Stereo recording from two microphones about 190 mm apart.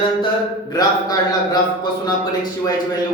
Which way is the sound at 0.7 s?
20° left (ahead or behind).